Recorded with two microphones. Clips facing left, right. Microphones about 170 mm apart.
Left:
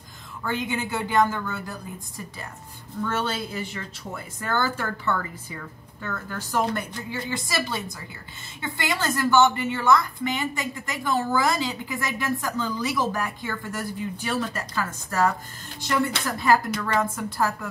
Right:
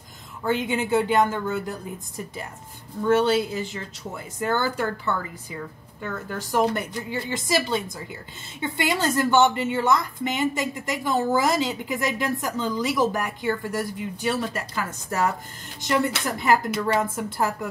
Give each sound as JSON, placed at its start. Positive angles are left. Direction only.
{"t": 0.4, "sound": "a woman's voice", "side_deg": -25}
{"t": 3.1, "sound": "a woman's voice", "side_deg": -15}
{"t": 6.3, "sound": "a woman's voice", "side_deg": -20}
{"t": 16.3, "sound": "a woman's voice", "side_deg": -20}